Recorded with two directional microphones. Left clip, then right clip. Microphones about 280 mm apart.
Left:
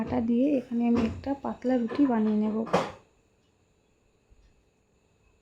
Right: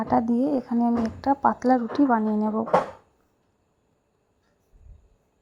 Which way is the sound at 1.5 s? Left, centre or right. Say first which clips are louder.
Right 6 dB; centre.